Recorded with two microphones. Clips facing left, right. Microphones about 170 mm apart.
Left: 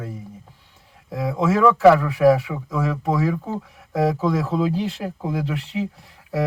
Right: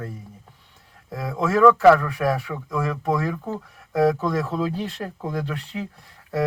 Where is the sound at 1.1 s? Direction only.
Centre (ahead or behind).